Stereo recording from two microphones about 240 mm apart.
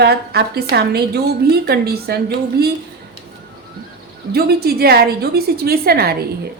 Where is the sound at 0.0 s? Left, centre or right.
Right.